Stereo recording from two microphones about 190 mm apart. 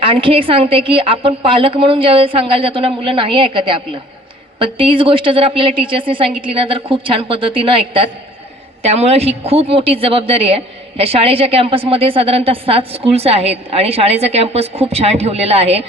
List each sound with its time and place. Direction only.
0.0 s a woman's voice: 30° right (ahead or behind)